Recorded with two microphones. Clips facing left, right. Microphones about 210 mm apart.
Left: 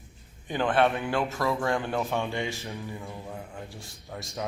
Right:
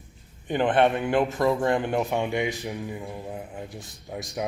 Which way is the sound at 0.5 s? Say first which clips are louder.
Right 3 dB; 20° right (ahead or behind).